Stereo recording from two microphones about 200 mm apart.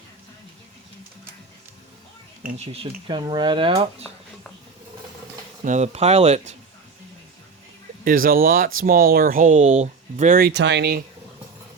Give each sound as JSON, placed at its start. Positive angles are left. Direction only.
{"t": 2.6, "sound": "speech", "side_deg": -30}
{"t": 5.6, "sound": "speech", "side_deg": -35}
{"t": 8.0, "sound": "speech", "side_deg": -45}